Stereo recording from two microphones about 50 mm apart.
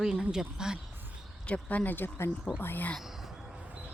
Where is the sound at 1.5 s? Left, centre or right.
Left.